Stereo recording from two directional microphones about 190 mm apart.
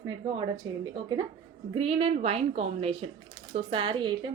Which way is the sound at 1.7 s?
30° right (ahead or behind).